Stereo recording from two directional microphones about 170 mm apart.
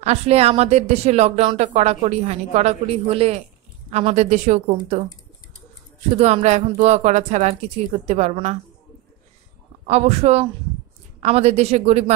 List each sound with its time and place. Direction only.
0.0 s a woman's voice: 40° right (ahead or behind)
6.1 s a woman's voice: 40° right (ahead or behind)
9.8 s a woman's voice: 40° right (ahead or behind)